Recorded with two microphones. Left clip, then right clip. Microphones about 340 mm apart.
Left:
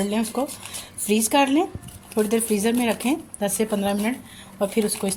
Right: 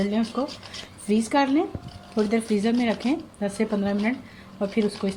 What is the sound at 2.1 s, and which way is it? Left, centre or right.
Speech, left.